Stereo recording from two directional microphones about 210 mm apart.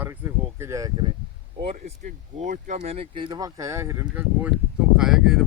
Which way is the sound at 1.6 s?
35° right (ahead or behind).